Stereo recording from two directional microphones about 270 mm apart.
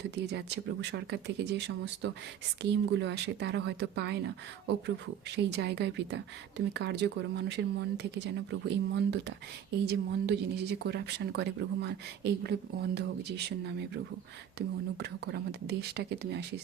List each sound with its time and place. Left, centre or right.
0.3 s speech: right
5.4 s speech: right